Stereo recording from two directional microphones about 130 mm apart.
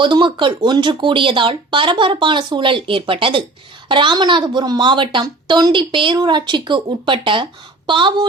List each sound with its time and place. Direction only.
0.0 s a woman's voice: 40° right (ahead or behind)